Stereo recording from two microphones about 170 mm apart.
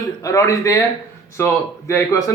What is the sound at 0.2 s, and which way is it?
Speech, 20° left (ahead or behind).